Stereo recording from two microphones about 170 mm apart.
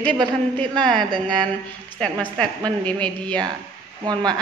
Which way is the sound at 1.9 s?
5° left (ahead or behind).